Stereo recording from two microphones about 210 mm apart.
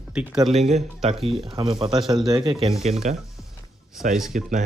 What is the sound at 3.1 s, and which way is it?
Speech, 35° right (ahead or behind).